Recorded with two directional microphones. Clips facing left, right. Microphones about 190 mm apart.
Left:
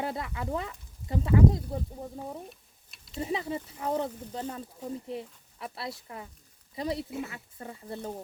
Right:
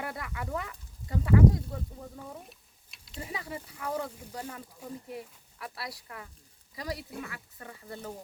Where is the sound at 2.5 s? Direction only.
Centre (ahead or behind).